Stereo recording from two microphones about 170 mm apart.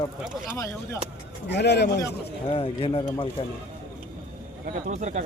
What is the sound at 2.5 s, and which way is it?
Speech, 35° left (ahead or behind).